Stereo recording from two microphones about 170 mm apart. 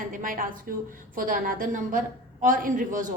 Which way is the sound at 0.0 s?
50° right (ahead or behind).